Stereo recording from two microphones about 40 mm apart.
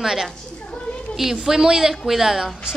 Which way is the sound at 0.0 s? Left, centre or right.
Centre.